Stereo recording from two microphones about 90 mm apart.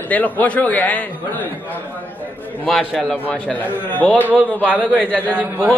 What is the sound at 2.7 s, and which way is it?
Speech, centre (ahead or behind).